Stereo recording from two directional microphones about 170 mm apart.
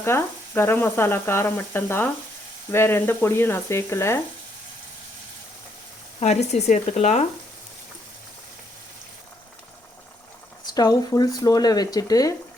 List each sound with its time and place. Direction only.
0.0 s speech: 15° left (ahead or behind)
6.1 s speech: 40° left (ahead or behind)
10.7 s speech: 20° left (ahead or behind)